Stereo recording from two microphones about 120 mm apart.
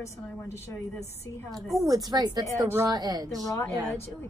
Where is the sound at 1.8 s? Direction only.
30° right (ahead or behind).